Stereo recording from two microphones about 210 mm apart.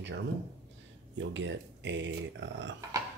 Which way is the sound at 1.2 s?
60° right (ahead or behind).